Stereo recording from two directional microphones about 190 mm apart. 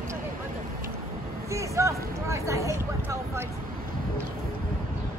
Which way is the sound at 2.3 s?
15° right (ahead or behind).